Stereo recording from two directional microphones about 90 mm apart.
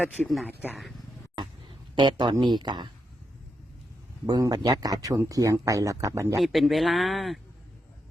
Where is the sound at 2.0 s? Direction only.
60° right (ahead or behind).